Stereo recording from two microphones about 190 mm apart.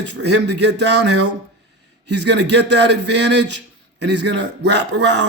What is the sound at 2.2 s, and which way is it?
A man's voice, 60° right (ahead or behind).